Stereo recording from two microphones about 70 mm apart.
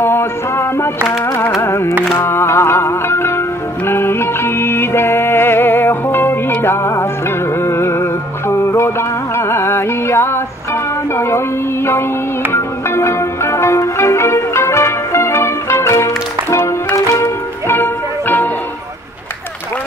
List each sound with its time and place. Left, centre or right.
0.0 s music: left
17.6 s music: left